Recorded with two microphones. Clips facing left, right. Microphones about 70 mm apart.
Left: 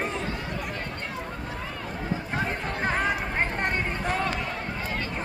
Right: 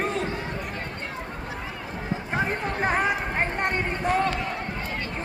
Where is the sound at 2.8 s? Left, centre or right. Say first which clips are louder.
Right 2 dB; centre.